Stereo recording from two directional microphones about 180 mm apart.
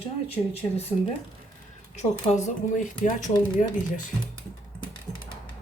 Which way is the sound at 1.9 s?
40° left (ahead or behind).